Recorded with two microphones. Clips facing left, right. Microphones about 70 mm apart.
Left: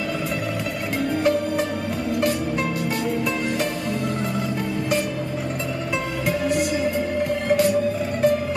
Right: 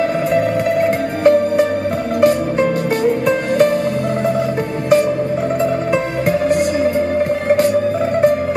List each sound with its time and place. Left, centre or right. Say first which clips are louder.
1.2 s music: right 11 dB; right
7.4 s music: right 4 dB; right